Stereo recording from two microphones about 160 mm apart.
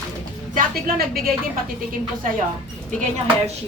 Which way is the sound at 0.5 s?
70° right (ahead or behind).